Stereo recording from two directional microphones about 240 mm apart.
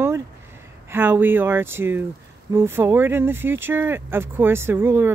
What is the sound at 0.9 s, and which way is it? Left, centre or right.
Speech, centre.